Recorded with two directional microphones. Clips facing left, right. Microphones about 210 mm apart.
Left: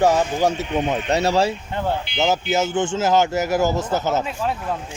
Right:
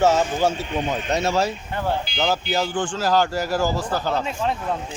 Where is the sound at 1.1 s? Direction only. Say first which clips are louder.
Left 3 dB; 35° left (ahead or behind).